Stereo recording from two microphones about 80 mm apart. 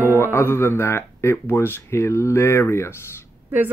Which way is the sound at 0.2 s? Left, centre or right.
Left.